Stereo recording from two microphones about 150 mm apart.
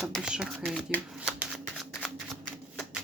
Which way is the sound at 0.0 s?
Centre (ahead or behind).